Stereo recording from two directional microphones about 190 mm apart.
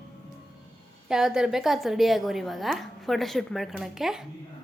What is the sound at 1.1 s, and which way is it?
A woman's voice, 5° right (ahead or behind).